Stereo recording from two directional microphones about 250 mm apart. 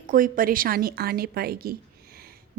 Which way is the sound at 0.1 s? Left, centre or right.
Right.